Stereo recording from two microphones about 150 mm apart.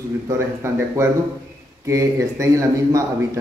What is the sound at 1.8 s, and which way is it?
A man's voice, 20° right (ahead or behind).